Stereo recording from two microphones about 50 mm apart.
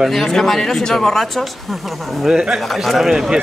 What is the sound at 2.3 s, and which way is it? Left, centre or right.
Speech, centre.